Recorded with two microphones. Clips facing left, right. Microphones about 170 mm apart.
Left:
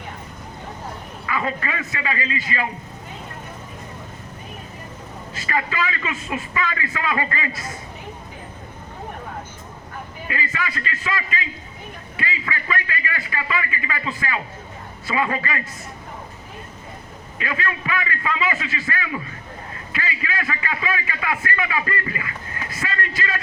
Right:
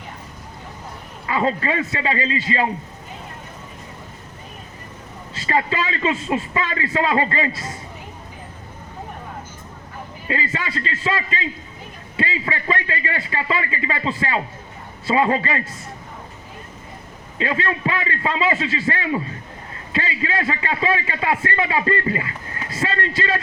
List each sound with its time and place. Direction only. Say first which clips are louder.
1.3 s a man's voice: right 5 dB; 30° right (ahead or behind)
5.3 s a man's voice: right 4 dB; 30° right (ahead or behind)
10.2 s a man's voice: right 3 dB; 30° right (ahead or behind)
17.3 s a man's voice: right 4 dB; 30° right (ahead or behind)